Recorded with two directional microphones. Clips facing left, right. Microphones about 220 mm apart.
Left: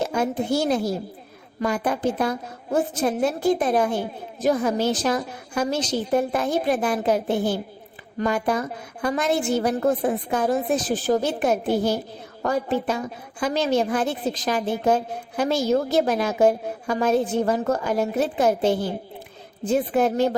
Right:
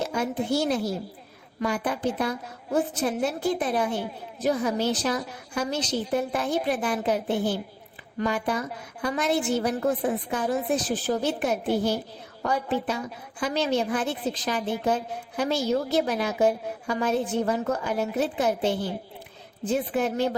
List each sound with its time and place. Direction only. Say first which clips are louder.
0.1 s a woman's voice: left 3 dB; 45° left (ahead or behind)